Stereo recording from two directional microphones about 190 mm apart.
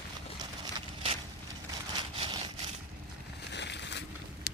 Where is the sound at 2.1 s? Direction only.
25° right (ahead or behind).